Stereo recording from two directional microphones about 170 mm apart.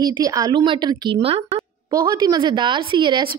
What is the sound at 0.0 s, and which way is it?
A woman's voice, 20° right (ahead or behind).